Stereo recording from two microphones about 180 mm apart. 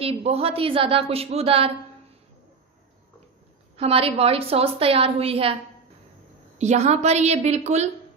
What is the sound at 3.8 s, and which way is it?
A woman's voice, 30° right (ahead or behind).